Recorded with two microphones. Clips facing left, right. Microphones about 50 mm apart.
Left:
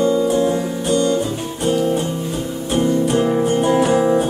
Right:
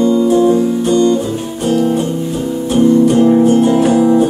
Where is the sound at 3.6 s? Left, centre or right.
Left.